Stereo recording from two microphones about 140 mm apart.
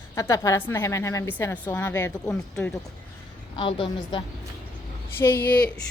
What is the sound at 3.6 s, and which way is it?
Speech, 40° left (ahead or behind).